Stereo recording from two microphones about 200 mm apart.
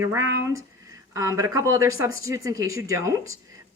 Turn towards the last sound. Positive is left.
turn(degrees=-15)  # may be behind; listen again after turning